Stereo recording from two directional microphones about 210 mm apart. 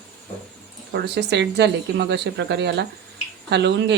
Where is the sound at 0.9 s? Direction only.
55° right (ahead or behind).